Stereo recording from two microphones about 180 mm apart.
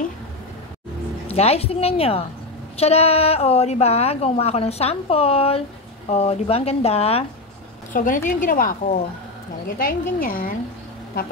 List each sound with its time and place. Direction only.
1.3 s a woman's voice: 35° left (ahead or behind)
7.9 s a woman's voice: 45° left (ahead or behind)